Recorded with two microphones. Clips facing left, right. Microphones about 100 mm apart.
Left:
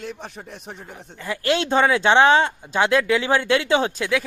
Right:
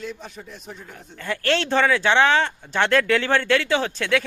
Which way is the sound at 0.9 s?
5° left (ahead or behind).